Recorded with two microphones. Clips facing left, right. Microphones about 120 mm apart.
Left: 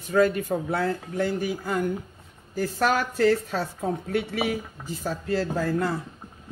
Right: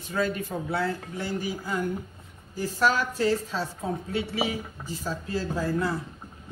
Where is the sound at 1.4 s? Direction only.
60° left (ahead or behind).